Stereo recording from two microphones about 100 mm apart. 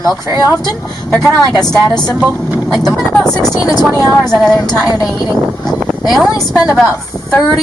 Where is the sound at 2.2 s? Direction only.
15° right (ahead or behind).